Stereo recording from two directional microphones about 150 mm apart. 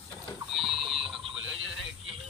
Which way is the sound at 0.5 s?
Centre (ahead or behind).